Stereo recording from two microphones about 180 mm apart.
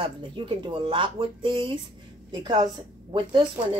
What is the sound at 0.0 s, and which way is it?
A woman's voice, 30° right (ahead or behind).